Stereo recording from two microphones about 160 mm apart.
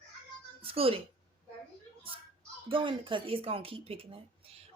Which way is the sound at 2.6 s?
30° right (ahead or behind).